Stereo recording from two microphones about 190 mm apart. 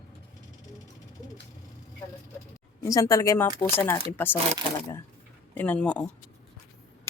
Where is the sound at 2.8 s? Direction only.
15° left (ahead or behind).